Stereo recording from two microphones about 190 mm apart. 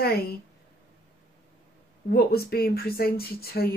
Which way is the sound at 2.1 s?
55° left (ahead or behind).